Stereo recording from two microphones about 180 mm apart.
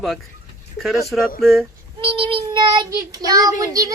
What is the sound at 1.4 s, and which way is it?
Speech, centre (ahead or behind).